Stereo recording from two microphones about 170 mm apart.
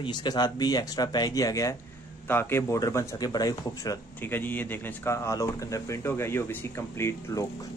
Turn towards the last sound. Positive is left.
turn(degrees=15)  # may be behind; listen again after turning